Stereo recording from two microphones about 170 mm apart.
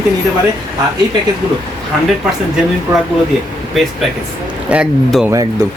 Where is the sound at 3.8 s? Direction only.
Centre (ahead or behind).